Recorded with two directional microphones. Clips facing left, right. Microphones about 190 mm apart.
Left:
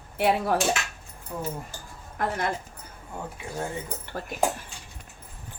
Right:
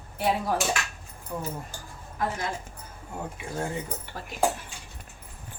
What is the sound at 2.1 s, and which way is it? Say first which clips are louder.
Speech: left 2 dB; 60° left (ahead or behind).